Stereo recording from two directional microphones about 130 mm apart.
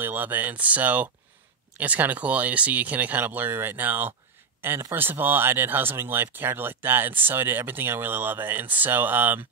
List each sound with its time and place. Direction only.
0.0 s speech: 15° right (ahead or behind)